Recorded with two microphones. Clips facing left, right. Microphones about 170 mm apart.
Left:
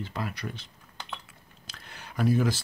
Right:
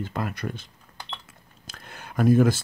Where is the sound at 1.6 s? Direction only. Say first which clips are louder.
Right 4 dB; 50° right (ahead or behind).